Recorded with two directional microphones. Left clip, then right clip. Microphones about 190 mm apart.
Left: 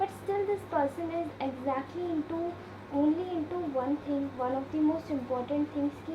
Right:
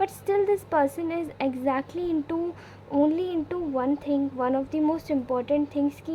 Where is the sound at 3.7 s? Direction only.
40° right (ahead or behind).